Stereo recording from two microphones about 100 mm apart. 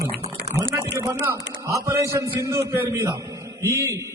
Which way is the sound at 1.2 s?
30° right (ahead or behind).